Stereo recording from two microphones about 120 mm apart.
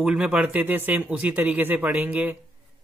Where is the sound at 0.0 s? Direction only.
10° right (ahead or behind).